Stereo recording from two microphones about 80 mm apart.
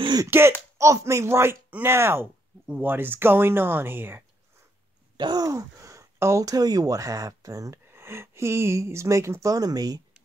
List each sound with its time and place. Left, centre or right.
0.3 s speech: right
5.1 s groan: right
5.5 s speech: right
7.9 s speech: right